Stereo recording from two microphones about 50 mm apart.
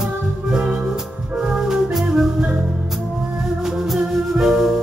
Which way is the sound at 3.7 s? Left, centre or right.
Centre.